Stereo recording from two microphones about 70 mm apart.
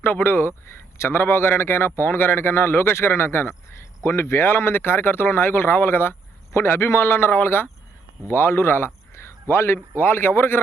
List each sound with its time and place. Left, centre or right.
0.0 s a man's voice: left